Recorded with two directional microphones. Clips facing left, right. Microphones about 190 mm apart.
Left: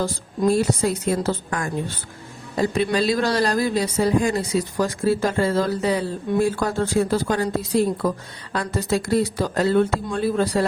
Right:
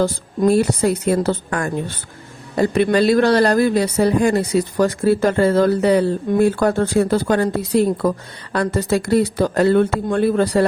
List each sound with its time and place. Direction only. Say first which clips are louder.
0.0 s speech: right 5 dB; 65° right (ahead or behind)